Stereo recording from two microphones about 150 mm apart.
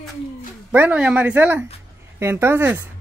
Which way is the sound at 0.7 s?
10° right (ahead or behind).